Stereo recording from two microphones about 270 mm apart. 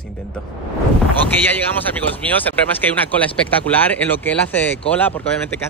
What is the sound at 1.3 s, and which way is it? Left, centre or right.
Speech, centre.